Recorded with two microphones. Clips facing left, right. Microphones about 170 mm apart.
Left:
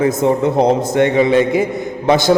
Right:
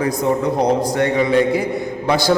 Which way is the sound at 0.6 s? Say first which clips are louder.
Left 5 dB; 25° left (ahead or behind).